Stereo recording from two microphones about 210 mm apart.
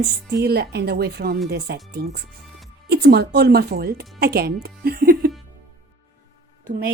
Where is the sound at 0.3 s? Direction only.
50° right (ahead or behind).